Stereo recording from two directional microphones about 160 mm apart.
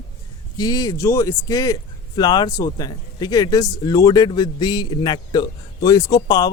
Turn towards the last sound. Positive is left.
turn(degrees=25)  # may be behind; listen again after turning